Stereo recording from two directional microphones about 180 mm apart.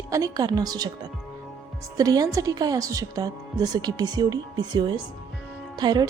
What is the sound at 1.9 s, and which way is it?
A woman's voice, 20° right (ahead or behind).